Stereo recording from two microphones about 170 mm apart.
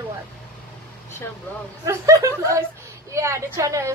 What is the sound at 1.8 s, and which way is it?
A woman's voice, 20° right (ahead or behind).